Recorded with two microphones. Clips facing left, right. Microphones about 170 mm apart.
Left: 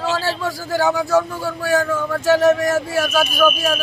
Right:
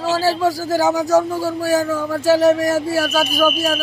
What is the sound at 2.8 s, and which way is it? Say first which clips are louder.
Speech: right 2 dB; 35° right (ahead or behind).